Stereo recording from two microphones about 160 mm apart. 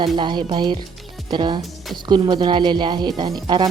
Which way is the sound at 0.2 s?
30° right (ahead or behind).